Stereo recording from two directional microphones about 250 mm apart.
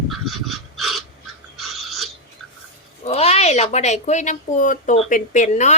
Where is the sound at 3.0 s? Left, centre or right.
Left.